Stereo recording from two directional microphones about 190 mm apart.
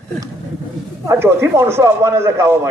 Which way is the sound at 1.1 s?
15° right (ahead or behind).